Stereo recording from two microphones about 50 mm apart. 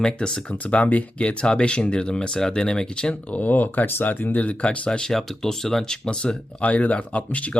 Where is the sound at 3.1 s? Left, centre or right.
Left.